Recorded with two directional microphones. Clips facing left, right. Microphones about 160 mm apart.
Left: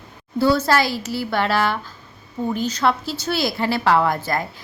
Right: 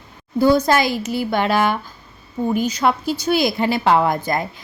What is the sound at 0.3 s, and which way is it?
A woman's voice, 15° right (ahead or behind).